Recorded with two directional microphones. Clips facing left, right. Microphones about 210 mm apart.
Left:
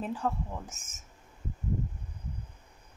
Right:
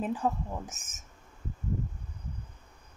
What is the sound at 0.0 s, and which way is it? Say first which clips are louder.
Speech: right 2 dB; 15° right (ahead or behind).